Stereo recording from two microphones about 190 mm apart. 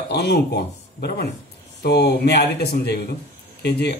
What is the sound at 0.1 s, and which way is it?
Speech, 60° left (ahead or behind).